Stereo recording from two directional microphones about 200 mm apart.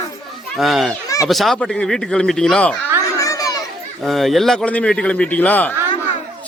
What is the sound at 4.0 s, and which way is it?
A man's voice, centre (ahead or behind).